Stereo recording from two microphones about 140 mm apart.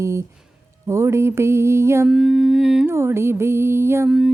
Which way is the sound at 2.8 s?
20° right (ahead or behind).